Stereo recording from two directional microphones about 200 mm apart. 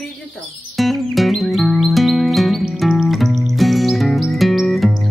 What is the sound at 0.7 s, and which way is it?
Music, centre (ahead or behind).